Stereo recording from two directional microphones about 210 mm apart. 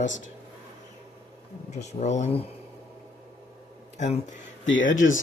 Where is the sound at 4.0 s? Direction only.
35° left (ahead or behind).